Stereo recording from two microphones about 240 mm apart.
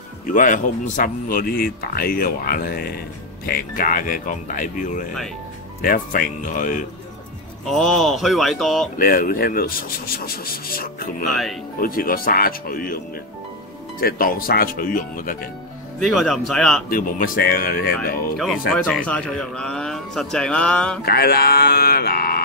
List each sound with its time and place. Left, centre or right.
0.3 s speech: left
7.6 s a man's voice: centre
8.9 s speech: left
16.0 s a man's voice: centre
16.9 s speech: left
18.9 s a man's voice: centre
21.0 s speech: left